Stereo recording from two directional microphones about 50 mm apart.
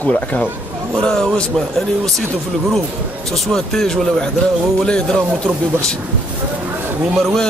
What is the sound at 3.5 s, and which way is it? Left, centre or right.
Speech, centre.